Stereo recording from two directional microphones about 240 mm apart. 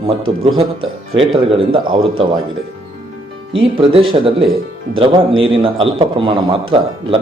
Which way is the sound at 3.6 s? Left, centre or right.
Right.